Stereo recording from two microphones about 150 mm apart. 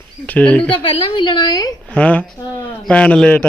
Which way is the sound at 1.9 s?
10° left (ahead or behind).